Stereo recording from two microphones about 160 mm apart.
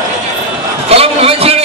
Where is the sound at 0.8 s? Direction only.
40° right (ahead or behind).